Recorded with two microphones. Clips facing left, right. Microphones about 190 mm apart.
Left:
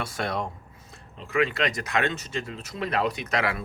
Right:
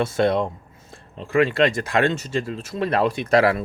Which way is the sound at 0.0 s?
25° right (ahead or behind).